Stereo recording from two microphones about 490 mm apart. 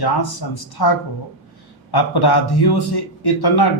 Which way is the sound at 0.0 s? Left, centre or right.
Left.